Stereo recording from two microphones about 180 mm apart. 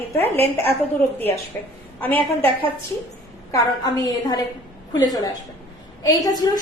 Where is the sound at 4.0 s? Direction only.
20° left (ahead or behind).